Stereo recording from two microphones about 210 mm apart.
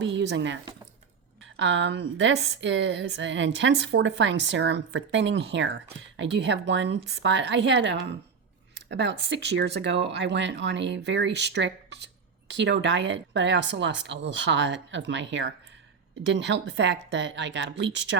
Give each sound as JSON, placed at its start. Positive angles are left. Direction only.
{"t": 0.0, "sound": "a woman's voice", "side_deg": -55}